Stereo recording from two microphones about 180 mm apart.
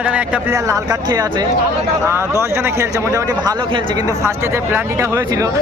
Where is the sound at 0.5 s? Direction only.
15° right (ahead or behind).